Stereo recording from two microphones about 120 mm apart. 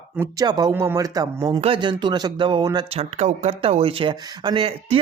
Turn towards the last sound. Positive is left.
turn(degrees=-55)  # may be behind; listen again after turning